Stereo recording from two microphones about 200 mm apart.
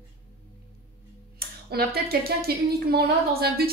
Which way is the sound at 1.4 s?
50° right (ahead or behind).